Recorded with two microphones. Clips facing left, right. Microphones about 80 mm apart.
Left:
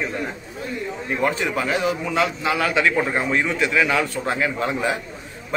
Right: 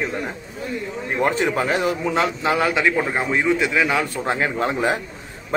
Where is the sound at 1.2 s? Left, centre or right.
Right.